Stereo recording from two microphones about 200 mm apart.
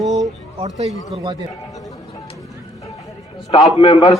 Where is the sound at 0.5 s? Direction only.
30° right (ahead or behind).